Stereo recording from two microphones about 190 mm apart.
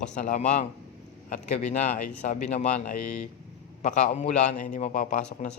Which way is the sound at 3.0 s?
5° left (ahead or behind).